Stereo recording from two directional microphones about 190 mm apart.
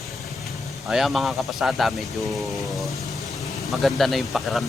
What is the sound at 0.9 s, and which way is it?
Speech, centre (ahead or behind).